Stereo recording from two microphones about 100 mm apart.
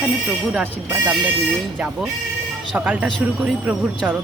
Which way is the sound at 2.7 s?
10° right (ahead or behind).